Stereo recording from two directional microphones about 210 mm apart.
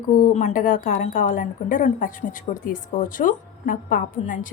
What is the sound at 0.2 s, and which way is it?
Speech, 35° left (ahead or behind).